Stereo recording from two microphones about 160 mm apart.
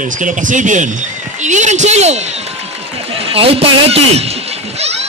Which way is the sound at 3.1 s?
40° right (ahead or behind).